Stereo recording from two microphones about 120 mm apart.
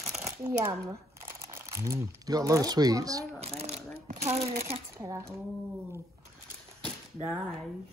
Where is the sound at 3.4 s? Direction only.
60° right (ahead or behind).